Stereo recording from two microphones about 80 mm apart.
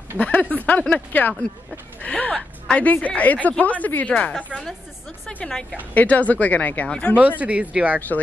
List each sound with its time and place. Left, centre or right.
0.2 s speech: left
5.3 s a woman's voice: centre
7.2 s speech: centre